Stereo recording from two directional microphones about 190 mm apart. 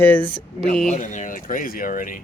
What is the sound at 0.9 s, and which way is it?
Speech, 40° left (ahead or behind).